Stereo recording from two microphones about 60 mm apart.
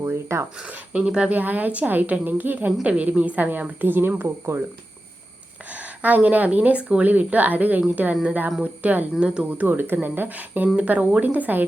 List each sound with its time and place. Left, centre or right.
0.0 s a sound: right
0.7 s a woman's voice: right
5.7 s a woman's voice: right
8.1 s speech: centre
8.6 s a woman's voice: right
9.5 s a woman's voice: right